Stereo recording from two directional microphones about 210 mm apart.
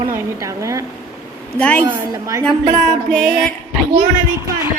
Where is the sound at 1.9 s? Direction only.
15° right (ahead or behind).